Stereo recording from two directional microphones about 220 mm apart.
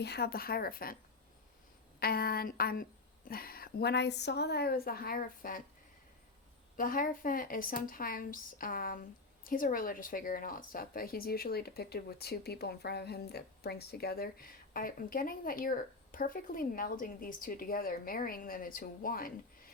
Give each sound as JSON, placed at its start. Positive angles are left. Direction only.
{"t": 0.0, "sound": "a woman's voice", "side_deg": 45}
{"t": 2.0, "sound": "a woman's voice", "side_deg": 45}
{"t": 6.7, "sound": "speech", "side_deg": 40}